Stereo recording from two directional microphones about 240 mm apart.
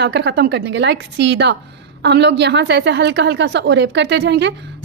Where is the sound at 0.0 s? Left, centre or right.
Right.